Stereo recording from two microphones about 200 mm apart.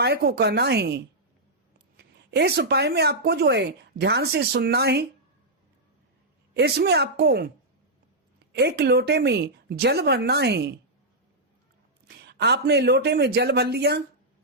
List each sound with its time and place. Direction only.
0.0 s a woman's voice: 55° right (ahead or behind)
6.5 s a woman's voice: 55° right (ahead or behind)
8.5 s a woman's voice: 55° right (ahead or behind)
12.0 s a woman's voice: 55° right (ahead or behind)